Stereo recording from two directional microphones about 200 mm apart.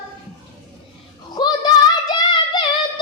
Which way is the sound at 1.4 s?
20° left (ahead or behind).